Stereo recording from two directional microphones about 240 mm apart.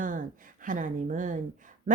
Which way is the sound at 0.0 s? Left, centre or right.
Right.